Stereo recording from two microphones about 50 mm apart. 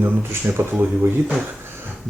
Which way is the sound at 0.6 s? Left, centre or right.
Right.